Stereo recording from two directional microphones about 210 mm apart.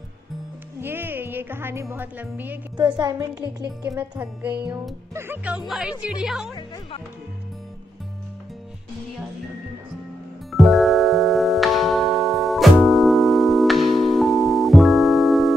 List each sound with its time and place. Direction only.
0.7 s a woman's voice: 10° right (ahead or behind)
10.5 s music: centre (ahead or behind)